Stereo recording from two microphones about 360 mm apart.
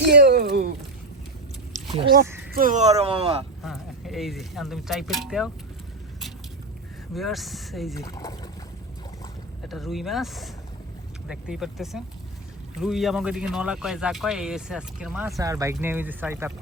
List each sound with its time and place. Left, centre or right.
0.0 s a sound: right
1.7 s a sound: right
2.5 s speech: right
3.6 s speech: centre
7.1 s speech: centre
9.6 s speech: centre